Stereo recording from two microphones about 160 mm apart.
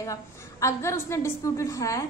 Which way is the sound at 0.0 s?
20° left (ahead or behind).